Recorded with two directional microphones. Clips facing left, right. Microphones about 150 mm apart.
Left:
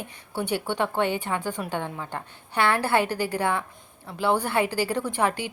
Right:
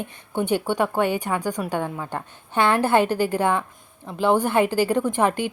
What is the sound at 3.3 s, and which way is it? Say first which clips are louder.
A woman's voice: right 4 dB; 20° right (ahead or behind).